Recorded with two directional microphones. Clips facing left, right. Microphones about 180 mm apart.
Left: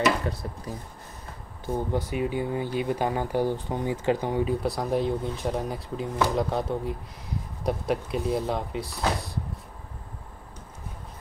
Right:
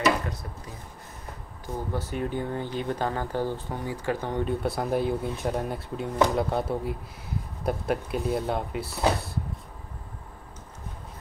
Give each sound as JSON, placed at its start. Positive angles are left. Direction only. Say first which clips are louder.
{"t": 0.3, "sound": "speech", "louder": "left 4 dB", "side_deg": 35}
{"t": 1.7, "sound": "speech", "louder": "left 4 dB", "side_deg": 15}